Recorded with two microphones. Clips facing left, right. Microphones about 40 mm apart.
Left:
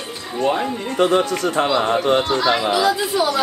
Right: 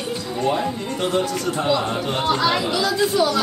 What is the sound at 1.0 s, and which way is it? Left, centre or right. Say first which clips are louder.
Speech: left 6 dB; left.